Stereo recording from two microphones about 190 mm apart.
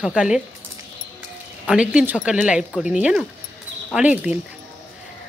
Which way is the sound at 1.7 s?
5° right (ahead or behind).